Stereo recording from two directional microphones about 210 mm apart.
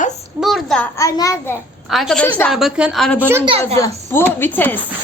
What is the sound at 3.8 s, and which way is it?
Speech, 10° left (ahead or behind).